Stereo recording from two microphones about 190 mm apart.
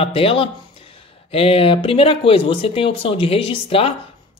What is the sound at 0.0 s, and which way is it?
Speech, 30° left (ahead or behind).